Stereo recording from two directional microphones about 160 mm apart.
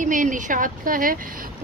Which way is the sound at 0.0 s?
55° right (ahead or behind).